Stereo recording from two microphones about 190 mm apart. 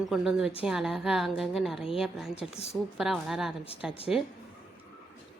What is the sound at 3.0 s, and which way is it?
A woman's voice, centre (ahead or behind).